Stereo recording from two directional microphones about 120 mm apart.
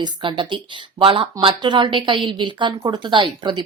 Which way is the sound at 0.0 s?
40° right (ahead or behind).